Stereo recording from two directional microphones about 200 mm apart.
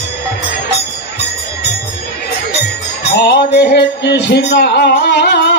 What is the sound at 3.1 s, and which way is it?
Music, 55° left (ahead or behind).